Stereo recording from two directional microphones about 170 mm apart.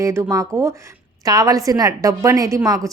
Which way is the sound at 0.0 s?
15° right (ahead or behind).